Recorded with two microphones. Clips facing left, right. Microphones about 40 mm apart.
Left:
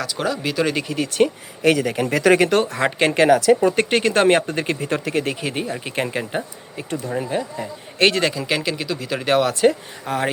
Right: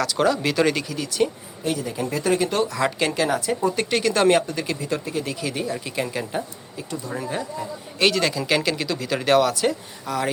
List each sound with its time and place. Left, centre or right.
0.0 s speech: centre
0.9 s speech: left
1.6 s speech: left
1.9 s speech: left
2.2 s speech: left
2.5 s speech: left
3.8 s speech: left
7.2 s speech: left
7.6 s a man's voice: left
8.2 s speech: left
8.4 s speech: centre
9.5 s speech: left